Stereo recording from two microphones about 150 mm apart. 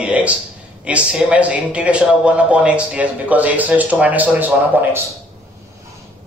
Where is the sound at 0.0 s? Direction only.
10° right (ahead or behind).